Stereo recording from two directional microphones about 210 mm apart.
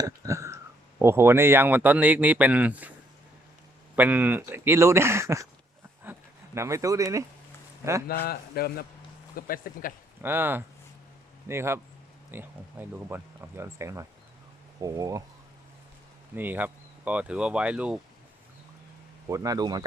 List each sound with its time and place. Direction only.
0.0 s speech: 15° right (ahead or behind)
3.9 s speech: 10° right (ahead or behind)
8.0 s a man's voice: 45° left (ahead or behind)
10.2 s speech: 10° right (ahead or behind)
16.3 s speech: 10° right (ahead or behind)
19.3 s speech: 15° right (ahead or behind)